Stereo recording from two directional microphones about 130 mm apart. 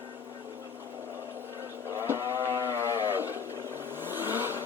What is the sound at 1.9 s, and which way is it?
Cattle, 20° right (ahead or behind).